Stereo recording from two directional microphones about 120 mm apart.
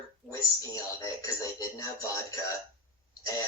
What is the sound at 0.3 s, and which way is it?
Speech, 30° left (ahead or behind).